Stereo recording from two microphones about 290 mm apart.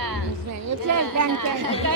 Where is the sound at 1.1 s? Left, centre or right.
Right.